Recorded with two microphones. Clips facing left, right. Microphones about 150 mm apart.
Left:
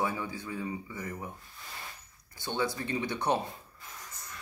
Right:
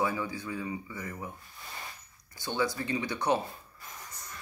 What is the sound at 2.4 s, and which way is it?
Speech, 25° left (ahead or behind).